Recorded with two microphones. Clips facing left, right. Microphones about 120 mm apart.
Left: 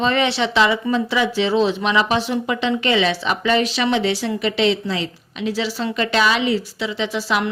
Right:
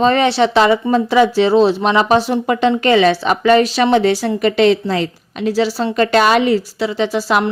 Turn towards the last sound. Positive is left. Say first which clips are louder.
# right 6 dB
turn(degrees=-40)  # may be behind; listen again after turning